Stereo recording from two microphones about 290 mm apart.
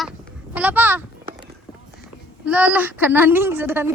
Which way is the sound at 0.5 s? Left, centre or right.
Centre.